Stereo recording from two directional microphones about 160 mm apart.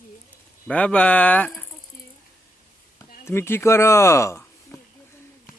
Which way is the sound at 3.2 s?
15° left (ahead or behind).